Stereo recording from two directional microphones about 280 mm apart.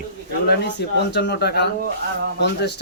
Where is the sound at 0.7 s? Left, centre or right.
Left.